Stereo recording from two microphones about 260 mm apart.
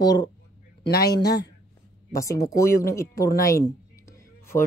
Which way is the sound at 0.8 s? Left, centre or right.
Left.